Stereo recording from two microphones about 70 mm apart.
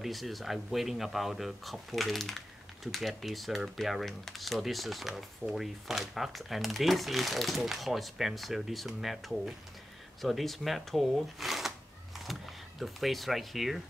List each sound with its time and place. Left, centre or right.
0.0 s speech: centre